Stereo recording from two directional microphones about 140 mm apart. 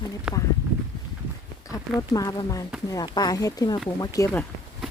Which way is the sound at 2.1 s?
25° left (ahead or behind).